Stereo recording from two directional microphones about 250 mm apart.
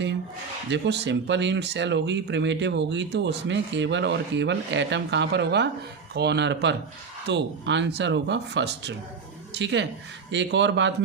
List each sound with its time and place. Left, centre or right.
0.7 s speech: right